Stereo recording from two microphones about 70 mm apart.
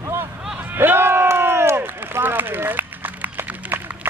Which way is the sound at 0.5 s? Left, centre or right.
Right.